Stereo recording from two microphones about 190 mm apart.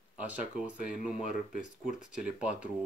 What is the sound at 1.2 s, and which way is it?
Speech, 45° left (ahead or behind).